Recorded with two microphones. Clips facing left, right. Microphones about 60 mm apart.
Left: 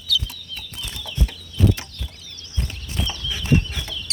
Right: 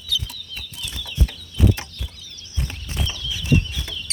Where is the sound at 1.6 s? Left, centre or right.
Centre.